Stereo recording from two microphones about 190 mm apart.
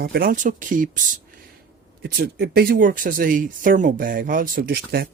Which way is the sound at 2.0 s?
55° right (ahead or behind).